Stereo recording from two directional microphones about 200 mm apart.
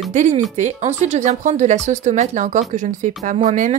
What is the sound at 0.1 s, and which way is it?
Speech, 35° right (ahead or behind).